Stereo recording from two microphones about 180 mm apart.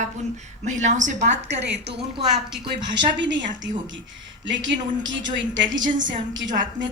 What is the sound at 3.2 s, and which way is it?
Speech, 85° right.